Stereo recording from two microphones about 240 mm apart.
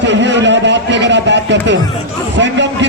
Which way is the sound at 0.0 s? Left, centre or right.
Right.